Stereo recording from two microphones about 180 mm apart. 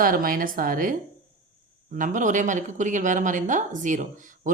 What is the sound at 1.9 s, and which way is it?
Speech, 45° right (ahead or behind).